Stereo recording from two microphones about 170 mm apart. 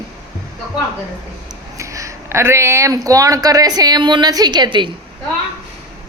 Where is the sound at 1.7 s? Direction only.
20° right (ahead or behind).